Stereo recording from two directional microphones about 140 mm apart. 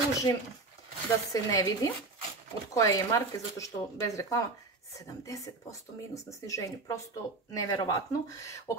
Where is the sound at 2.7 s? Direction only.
20° left (ahead or behind).